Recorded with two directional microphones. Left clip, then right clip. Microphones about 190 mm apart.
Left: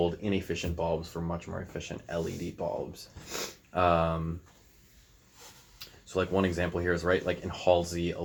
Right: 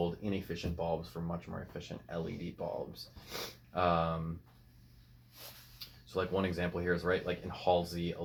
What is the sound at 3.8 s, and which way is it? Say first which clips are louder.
Speech: left 5 dB; 40° left (ahead or behind).